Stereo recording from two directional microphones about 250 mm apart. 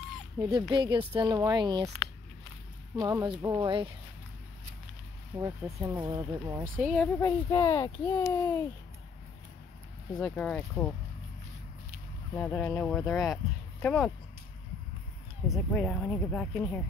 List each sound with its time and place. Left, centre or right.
0.4 s speech: centre
3.0 s speech: centre
5.4 s speech: centre
6.8 s a child's voice: centre
10.1 s speech: centre
12.4 s speech: centre
15.5 s speech: centre